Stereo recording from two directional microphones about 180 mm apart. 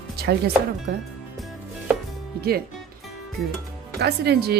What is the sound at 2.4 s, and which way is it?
Speech, 60° right (ahead or behind).